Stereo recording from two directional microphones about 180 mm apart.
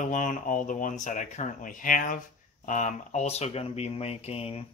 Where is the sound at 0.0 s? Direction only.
45° left (ahead or behind).